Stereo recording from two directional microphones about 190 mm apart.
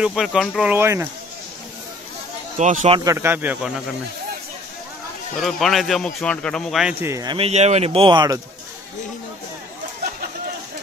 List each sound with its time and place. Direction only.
0.0 s speech: centre (ahead or behind)
2.5 s speech: 40° right (ahead or behind)
3.0 s speech: 15° right (ahead or behind)
5.4 s speech: centre (ahead or behind); by 7.3 s 15° right (ahead or behind)
7.3 s speech: 35° right (ahead or behind)